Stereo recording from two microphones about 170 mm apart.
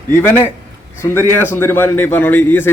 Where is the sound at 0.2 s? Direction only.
10° left (ahead or behind).